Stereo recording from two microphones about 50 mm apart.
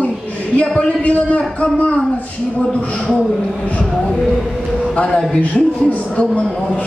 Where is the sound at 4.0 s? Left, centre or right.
Centre.